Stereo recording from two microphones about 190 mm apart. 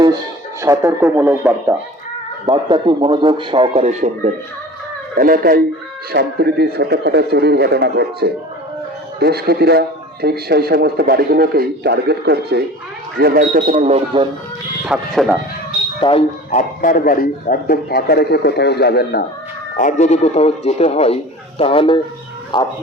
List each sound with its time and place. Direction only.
0.6 s speech: 15° right (ahead or behind)
2.5 s a man's voice: 25° right (ahead or behind)
5.1 s a man's voice: 50° right (ahead or behind)
13.5 s speech: 40° right (ahead or behind)
14.8 s speech: centre (ahead or behind)
16.0 s speech: 25° left (ahead or behind)
16.5 s a man's voice: 40° left (ahead or behind)
19.7 s speech: 40° left (ahead or behind); by 22.7 s 25° left (ahead or behind)